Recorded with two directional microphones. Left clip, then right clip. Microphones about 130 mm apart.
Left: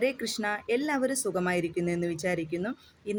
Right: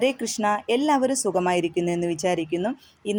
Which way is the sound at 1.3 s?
35° right (ahead or behind).